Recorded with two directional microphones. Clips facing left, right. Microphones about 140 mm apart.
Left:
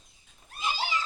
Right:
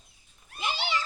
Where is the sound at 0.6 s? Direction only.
70° right (ahead or behind).